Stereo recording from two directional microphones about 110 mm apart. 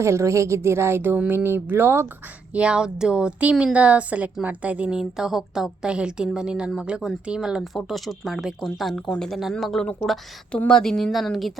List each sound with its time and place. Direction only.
0.0 s a woman's voice: 25° right (ahead or behind); by 11.6 s centre (ahead or behind)